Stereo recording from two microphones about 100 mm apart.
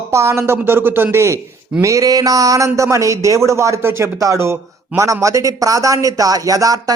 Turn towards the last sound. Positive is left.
turn(degrees=-35)  # may be behind; listen again after turning